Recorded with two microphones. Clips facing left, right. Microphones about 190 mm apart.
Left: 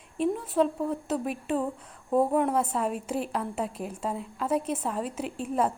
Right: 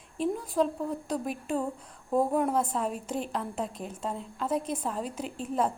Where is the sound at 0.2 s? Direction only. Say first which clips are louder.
Left 2 dB; 5° left (ahead or behind).